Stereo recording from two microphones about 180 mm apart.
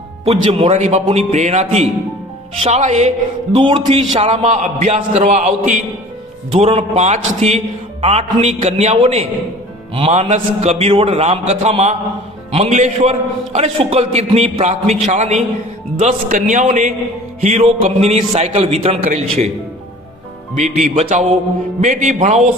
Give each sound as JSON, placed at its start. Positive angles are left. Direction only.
{"t": 0.6, "sound": "a man's voice", "side_deg": -40}
{"t": 3.5, "sound": "a man's voice", "side_deg": -30}
{"t": 20.6, "sound": "a man's voice", "side_deg": -45}